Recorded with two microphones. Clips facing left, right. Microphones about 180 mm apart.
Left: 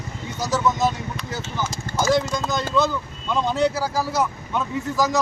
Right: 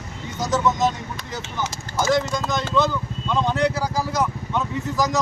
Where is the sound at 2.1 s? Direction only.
10° left (ahead or behind).